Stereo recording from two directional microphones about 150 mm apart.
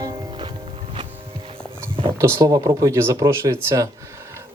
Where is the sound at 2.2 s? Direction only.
20° right (ahead or behind).